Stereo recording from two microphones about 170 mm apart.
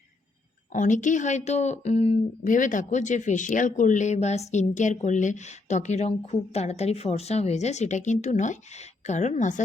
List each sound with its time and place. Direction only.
0.7 s speech: 45° left (ahead or behind)
2.4 s speech: 50° left (ahead or behind)